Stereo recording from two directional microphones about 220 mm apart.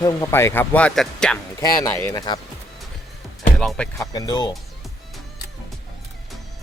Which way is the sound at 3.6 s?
5° left (ahead or behind).